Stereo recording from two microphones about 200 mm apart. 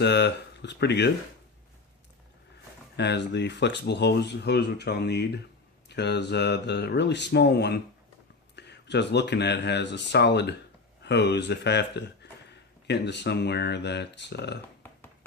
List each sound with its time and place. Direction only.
0.0 s speech: 60° left (ahead or behind)
2.9 s speech: 60° left (ahead or behind)